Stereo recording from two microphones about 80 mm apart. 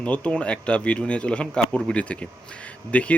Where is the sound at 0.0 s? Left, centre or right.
Centre.